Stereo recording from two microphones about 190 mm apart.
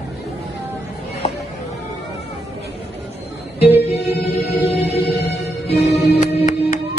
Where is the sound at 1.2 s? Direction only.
35° left (ahead or behind).